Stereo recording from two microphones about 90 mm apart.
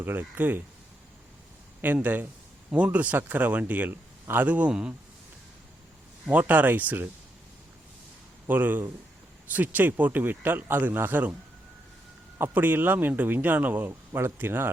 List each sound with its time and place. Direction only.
0.0 s a man's voice: 20° right (ahead or behind)
1.8 s a man's voice: 20° right (ahead or behind)
6.5 s a man's voice: 20° right (ahead or behind)
8.4 s a man's voice: 20° right (ahead or behind)
12.4 s a man's voice: 20° right (ahead or behind)